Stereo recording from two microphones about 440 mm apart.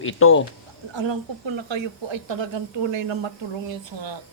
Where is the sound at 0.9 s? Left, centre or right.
Right.